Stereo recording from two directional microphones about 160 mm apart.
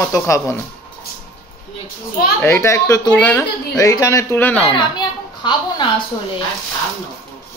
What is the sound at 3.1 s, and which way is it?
Speech, 10° left (ahead or behind).